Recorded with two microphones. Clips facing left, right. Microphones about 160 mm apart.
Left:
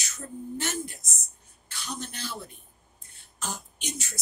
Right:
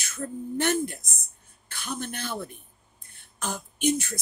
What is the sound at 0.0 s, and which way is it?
A woman's voice, 55° right (ahead or behind).